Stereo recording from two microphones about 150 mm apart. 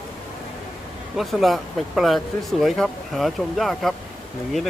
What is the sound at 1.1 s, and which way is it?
Speech, centre (ahead or behind).